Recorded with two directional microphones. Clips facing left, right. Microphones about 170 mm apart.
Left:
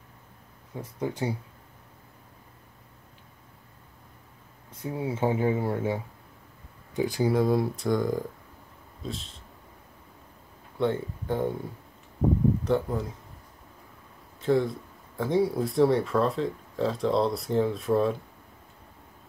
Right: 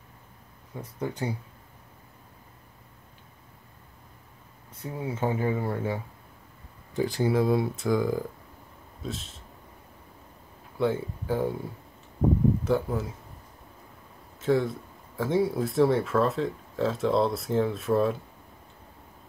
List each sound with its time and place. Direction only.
0.7 s speech: 10° left (ahead or behind)
4.9 s speech: 10° left (ahead or behind)
6.9 s a sound: 15° left (ahead or behind)
7.2 s speech: centre (ahead or behind)
10.8 s speech: 5° right (ahead or behind)
12.6 s speech: 5° right (ahead or behind)
14.4 s speech: centre (ahead or behind)